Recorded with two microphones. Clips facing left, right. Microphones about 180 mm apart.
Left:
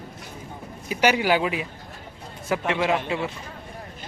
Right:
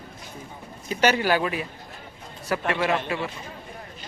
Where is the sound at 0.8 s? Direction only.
10° left (ahead or behind).